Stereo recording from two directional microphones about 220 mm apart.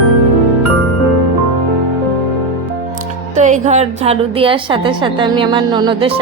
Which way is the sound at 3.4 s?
35° right (ahead or behind).